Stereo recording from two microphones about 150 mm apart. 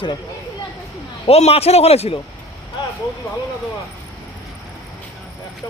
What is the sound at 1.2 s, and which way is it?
Speech, 40° left (ahead or behind).